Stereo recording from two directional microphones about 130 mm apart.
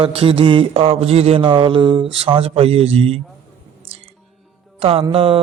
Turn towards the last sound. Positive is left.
turn(degrees=-45)  # may be behind; listen again after turning